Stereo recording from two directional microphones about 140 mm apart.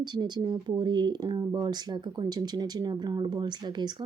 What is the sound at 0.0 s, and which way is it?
Speech, 30° right (ahead or behind).